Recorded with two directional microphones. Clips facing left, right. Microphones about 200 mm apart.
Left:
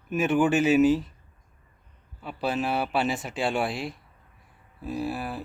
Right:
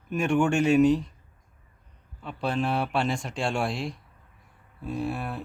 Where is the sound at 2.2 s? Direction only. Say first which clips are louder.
Even; 5° left (ahead or behind).